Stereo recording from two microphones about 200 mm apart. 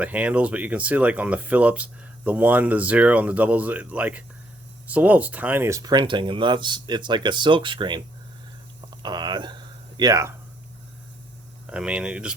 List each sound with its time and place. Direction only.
0.0 s speech: 5° right (ahead or behind)
11.6 s speech: 5° right (ahead or behind)